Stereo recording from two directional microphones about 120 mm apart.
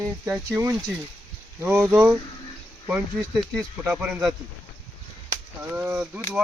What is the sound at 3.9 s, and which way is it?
Speech, 10° right (ahead or behind).